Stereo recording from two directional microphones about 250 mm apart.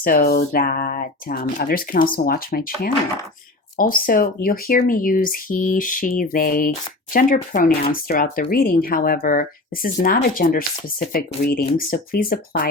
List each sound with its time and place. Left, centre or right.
0.0 s speech: left